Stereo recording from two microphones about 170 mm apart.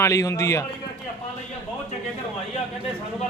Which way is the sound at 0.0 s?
20° left (ahead or behind).